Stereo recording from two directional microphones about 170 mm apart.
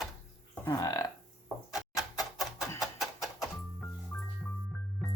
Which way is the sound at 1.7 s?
Centre (ahead or behind).